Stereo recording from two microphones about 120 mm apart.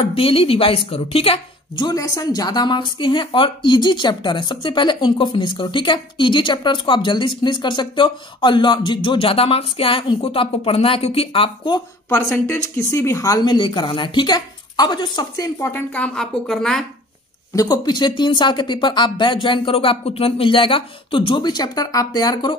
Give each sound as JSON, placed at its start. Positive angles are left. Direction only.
{"t": 0.0, "sound": "a woman's voice", "side_deg": 50}
{"t": 1.9, "sound": "a woman's voice", "side_deg": 30}
{"t": 12.4, "sound": "a woman's voice", "side_deg": 20}
{"t": 15.7, "sound": "speech", "side_deg": 10}
{"t": 17.6, "sound": "a woman's voice", "side_deg": 35}